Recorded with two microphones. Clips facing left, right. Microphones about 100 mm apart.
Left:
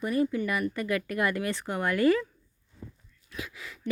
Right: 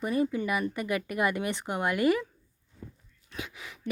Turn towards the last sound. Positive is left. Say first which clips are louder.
# even
turn(degrees=-25)  # may be behind; listen again after turning